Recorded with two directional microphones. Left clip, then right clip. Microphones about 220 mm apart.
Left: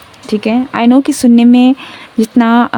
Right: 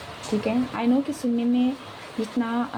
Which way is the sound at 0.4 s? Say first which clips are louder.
Left 14 dB; 50° left (ahead or behind).